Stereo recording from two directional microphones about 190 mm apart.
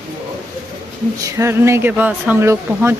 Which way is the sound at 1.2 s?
15° right (ahead or behind).